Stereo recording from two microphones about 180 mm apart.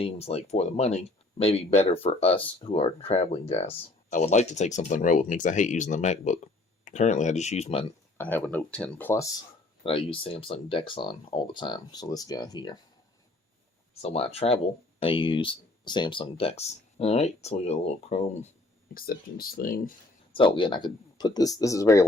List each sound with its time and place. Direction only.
0.0 s speech: 35° left (ahead or behind)
8.2 s speech: 10° left (ahead or behind)
9.8 s speech: 30° left (ahead or behind)
14.0 s speech: 35° left (ahead or behind)
18.9 s speech: 55° left (ahead or behind)
20.3 s speech: 30° left (ahead or behind)